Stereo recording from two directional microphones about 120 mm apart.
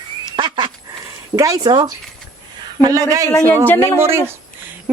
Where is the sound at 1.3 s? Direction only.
30° right (ahead or behind).